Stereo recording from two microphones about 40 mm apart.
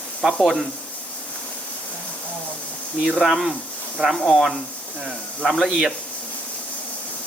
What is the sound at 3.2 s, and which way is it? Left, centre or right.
Speech, centre.